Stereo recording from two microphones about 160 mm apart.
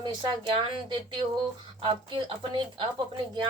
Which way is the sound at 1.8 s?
35° right (ahead or behind).